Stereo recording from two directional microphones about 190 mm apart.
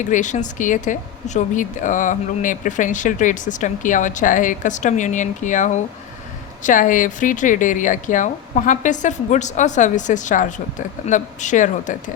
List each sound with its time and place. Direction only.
0.0 s speech: 40° left (ahead or behind)